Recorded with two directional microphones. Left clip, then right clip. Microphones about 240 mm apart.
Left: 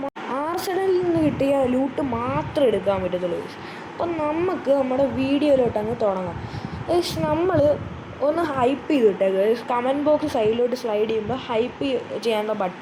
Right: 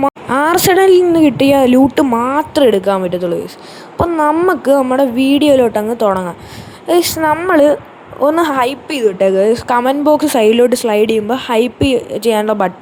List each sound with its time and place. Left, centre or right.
0.3 s a woman's voice: right
8.4 s a woman's voice: right